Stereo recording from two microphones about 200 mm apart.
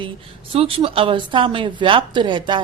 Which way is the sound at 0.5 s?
25° right (ahead or behind).